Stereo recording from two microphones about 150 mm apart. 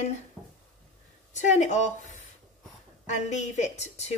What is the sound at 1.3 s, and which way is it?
A woman's voice, 50° left (ahead or behind).